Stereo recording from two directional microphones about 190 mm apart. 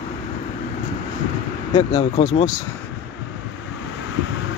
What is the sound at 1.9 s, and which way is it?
Speech, 35° left (ahead or behind).